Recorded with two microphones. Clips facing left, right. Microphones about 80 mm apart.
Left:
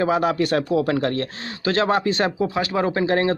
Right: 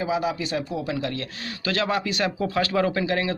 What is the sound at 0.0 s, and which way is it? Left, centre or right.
Speech, left.